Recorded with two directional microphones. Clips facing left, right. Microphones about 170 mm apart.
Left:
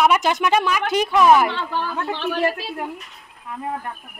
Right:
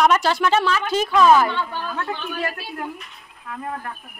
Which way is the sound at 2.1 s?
90° left.